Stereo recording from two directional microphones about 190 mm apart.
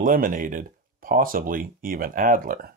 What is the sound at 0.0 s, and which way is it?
Speech, 45° right (ahead or behind).